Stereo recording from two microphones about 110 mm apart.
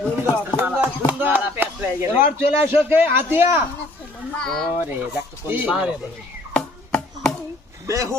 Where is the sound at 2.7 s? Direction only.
20° right (ahead or behind).